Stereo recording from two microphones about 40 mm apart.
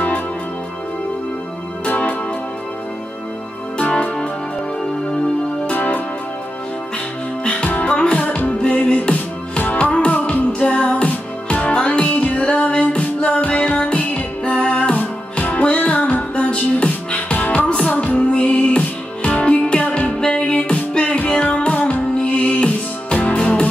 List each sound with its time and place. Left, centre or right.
1.9 s music: left
3.9 s music: left
5.7 s music: left
7.4 s music: left